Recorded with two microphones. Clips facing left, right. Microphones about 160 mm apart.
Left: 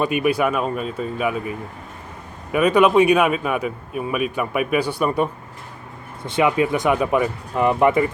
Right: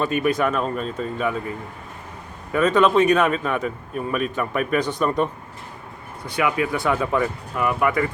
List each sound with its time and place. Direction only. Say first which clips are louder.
0.0 s a man's voice: left 2 dB; 10° left (ahead or behind)
6.2 s a man's voice: left 4 dB; 25° left (ahead or behind)
7.5 s speech: left 5 dB; 25° left (ahead or behind)